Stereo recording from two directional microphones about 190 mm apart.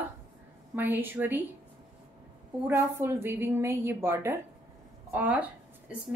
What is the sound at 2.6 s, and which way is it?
A woman's voice, 10° right (ahead or behind).